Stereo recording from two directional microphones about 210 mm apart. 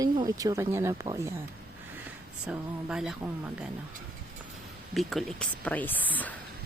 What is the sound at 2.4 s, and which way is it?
Speech, 5° right (ahead or behind).